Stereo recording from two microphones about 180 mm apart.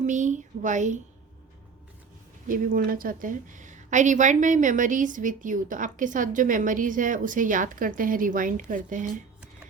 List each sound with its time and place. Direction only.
0.0 s a woman's voice: 45° right (ahead or behind)
2.5 s a woman's voice: 50° right (ahead or behind)